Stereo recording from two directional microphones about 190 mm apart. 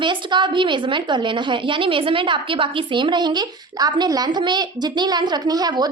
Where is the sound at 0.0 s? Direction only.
25° right (ahead or behind).